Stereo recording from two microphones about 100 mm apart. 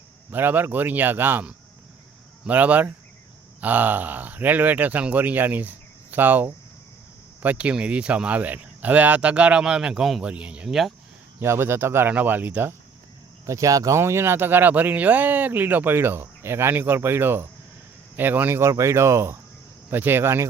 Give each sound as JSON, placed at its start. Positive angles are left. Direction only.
{"t": 0.3, "sound": "speech", "side_deg": -20}
{"t": 11.3, "sound": "speech", "side_deg": -25}
{"t": 13.4, "sound": "speech", "side_deg": -30}